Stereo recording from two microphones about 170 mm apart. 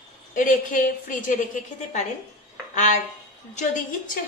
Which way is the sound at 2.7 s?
45° left (ahead or behind).